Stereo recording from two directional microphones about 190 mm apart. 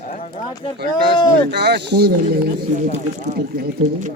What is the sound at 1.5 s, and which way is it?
Speech, 60° right (ahead or behind).